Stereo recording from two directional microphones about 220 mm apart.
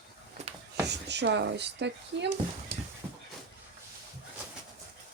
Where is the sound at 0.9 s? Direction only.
50° right (ahead or behind).